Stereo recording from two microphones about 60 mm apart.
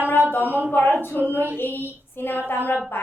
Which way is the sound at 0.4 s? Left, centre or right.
Right.